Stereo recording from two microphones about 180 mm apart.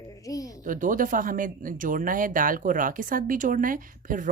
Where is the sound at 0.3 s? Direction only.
20° left (ahead or behind).